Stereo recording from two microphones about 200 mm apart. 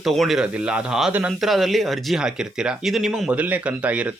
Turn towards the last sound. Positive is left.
turn(degrees=-5)  # may be behind; listen again after turning